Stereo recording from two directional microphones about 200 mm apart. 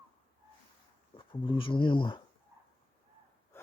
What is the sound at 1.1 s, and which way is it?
Speech, 25° left (ahead or behind).